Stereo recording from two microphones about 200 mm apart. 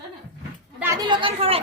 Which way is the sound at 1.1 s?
25° right (ahead or behind).